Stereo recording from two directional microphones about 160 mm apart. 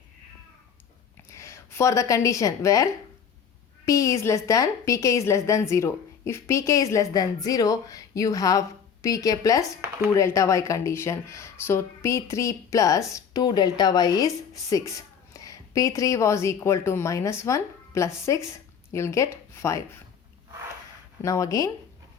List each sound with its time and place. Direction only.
1.3 s a woman's voice: 20° left (ahead or behind)
21.2 s speech: 20° left (ahead or behind)